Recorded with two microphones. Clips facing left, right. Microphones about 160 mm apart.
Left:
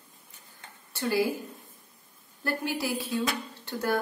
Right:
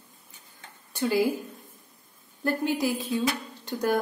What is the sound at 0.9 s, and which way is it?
Speech, 15° right (ahead or behind).